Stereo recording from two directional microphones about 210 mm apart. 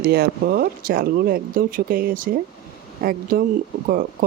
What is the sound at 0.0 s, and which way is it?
Speech, 50° right (ahead or behind).